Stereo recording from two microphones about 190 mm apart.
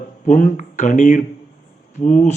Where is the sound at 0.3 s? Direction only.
40° left (ahead or behind).